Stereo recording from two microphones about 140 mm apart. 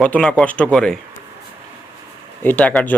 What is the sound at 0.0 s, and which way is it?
Speech, 5° left (ahead or behind).